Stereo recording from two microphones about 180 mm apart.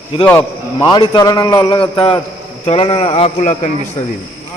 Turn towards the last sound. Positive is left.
turn(degrees=45)  # may be behind; listen again after turning